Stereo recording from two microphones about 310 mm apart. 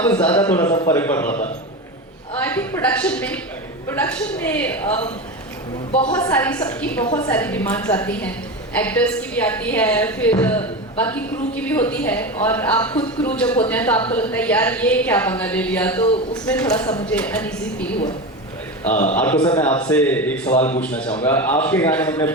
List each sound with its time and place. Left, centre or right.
0.0 s a woman's voice: centre
2.4 s a woman's voice: centre
5.9 s a man's voice: centre
6.1 s a woman's voice: centre
19.1 s a woman's voice: centre
20.6 s a man's voice: left
20.8 s a woman's voice: centre